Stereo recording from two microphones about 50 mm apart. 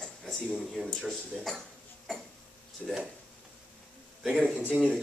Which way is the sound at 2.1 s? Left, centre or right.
Centre.